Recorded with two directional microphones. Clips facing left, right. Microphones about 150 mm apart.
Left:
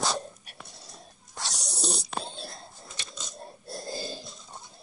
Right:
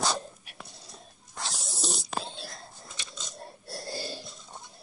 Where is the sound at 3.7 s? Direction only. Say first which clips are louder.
Left 2 dB; 20° left (ahead or behind).